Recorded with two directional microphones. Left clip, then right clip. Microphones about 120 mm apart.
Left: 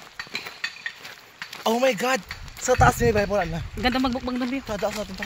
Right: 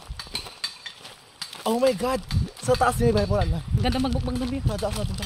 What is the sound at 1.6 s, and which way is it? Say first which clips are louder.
Speech: left 1 dB; 10° right (ahead or behind).